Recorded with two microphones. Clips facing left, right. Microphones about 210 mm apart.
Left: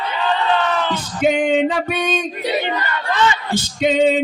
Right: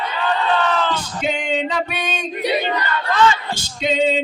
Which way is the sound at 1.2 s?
55° left (ahead or behind).